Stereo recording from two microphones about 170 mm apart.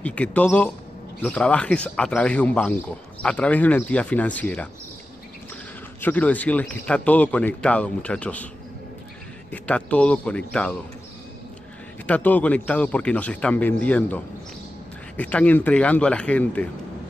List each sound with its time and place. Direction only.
0.0 s a man's voice: 10° left (ahead or behind)
5.9 s a man's voice: 10° left (ahead or behind)
9.5 s a man's voice: 5° left (ahead or behind)
12.1 s a man's voice: 10° left (ahead or behind)